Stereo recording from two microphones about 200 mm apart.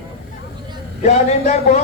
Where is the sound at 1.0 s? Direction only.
35° left (ahead or behind).